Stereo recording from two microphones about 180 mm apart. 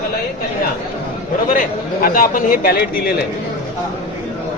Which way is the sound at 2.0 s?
50° left (ahead or behind).